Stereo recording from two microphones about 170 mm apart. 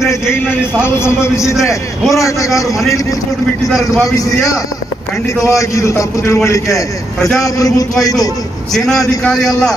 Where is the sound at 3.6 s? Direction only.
Centre (ahead or behind).